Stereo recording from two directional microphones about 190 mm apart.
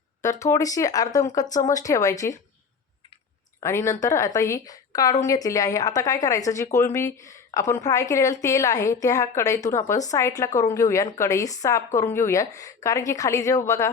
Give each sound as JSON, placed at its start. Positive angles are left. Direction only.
{"t": 0.2, "sound": "a woman's voice", "side_deg": 15}
{"t": 3.6, "sound": "a woman's voice", "side_deg": 15}